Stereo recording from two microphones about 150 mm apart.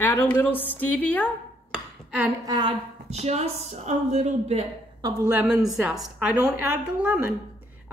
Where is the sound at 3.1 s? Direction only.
45° right (ahead or behind).